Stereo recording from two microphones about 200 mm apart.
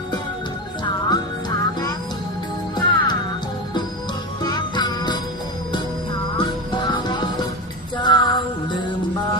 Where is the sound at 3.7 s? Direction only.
20° left (ahead or behind).